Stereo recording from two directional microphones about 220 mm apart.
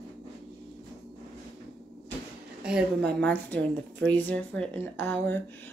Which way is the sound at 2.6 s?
5° right (ahead or behind).